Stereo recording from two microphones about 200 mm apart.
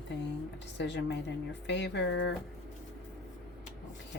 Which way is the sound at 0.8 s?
60° left (ahead or behind).